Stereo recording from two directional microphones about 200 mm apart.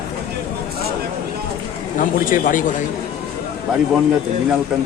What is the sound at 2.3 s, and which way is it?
Speech, 40° left (ahead or behind).